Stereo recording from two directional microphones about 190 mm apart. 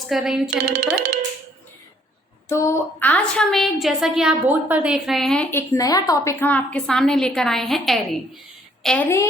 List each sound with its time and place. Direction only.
0.1 s a woman's voice: centre (ahead or behind)
0.5 s speech: 45° right (ahead or behind)
2.5 s a woman's voice: 15° left (ahead or behind)